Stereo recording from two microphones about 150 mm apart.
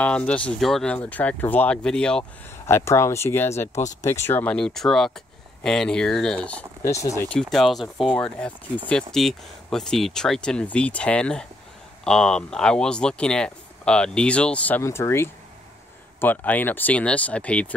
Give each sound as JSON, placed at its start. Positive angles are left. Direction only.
{"t": 0.0, "sound": "speech", "side_deg": 5}
{"t": 2.6, "sound": "speech", "side_deg": 20}
{"t": 6.9, "sound": "speech", "side_deg": 20}
{"t": 7.2, "sound": "speech", "side_deg": 5}